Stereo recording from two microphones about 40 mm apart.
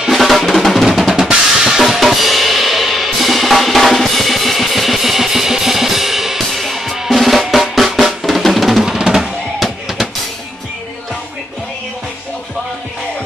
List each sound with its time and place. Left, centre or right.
0.1 s drum: centre
1.8 s drum kit: centre
8.9 s drum: centre
9.2 s music: centre